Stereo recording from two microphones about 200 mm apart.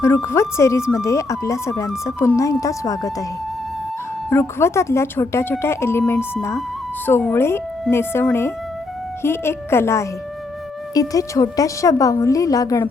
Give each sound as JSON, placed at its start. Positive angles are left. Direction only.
{"t": 0.0, "sound": "a woman's voice", "side_deg": 15}
{"t": 4.3, "sound": "a woman's voice", "side_deg": 10}